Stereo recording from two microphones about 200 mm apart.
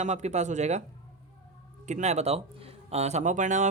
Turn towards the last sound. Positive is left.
turn(degrees=-40)  # may be behind; listen again after turning